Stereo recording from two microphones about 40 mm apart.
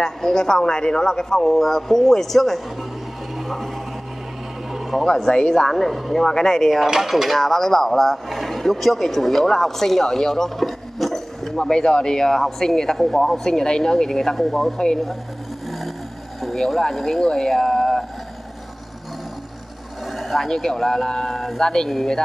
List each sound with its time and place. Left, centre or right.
0.0 s speech: centre
3.3 s a sound: centre
5.1 s speech: centre
5.5 s speech: centre
6.8 s speech: centre
7.3 s speech: centre
16.9 s speech: centre
20.1 s a sound: centre
20.4 s speech: centre